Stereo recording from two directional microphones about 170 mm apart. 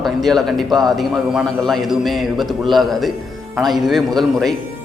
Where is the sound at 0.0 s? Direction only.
Centre (ahead or behind).